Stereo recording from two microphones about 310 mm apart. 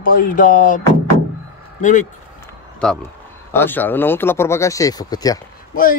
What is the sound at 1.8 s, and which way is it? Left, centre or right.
Speech, left.